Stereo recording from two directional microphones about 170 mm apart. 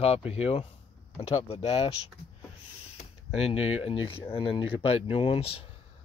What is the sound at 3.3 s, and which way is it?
Speech, 35° left (ahead or behind).